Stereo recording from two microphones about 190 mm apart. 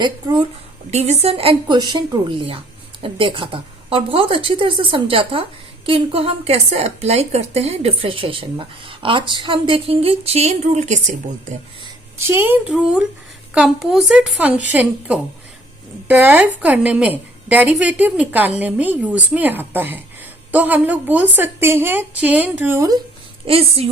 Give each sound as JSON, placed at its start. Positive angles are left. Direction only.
{"t": 0.0, "sound": "a woman's voice", "side_deg": -20}
{"t": 0.9, "sound": "a woman's voice", "side_deg": -35}
{"t": 12.1, "sound": "a woman's voice", "side_deg": -10}
{"t": 23.5, "sound": "a woman's voice", "side_deg": -30}